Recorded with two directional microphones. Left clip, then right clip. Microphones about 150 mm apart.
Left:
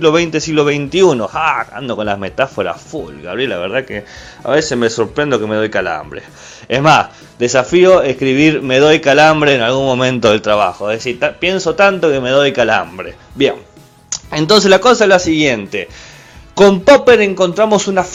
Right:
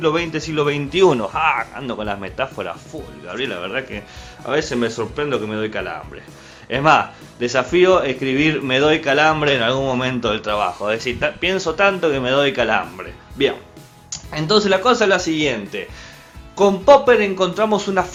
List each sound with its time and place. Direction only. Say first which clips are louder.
0.0 s speech: left 7 dB; 50° left (ahead or behind)
0.8 s speech: left 4 dB; 30° left (ahead or behind); by 9.6 s 45° left (ahead or behind)
9.6 s speech: left 6 dB; 30° left (ahead or behind)
10.0 s speech: left 9 dB; 50° left (ahead or behind)
10.7 s speech: left 4 dB; 20° left (ahead or behind)
14.1 s speech: left 7 dB; 50° left (ahead or behind)
16.6 s a man's voice: left 5 dB; 60° left (ahead or behind)
17.4 s speech: left 6 dB; 40° left (ahead or behind)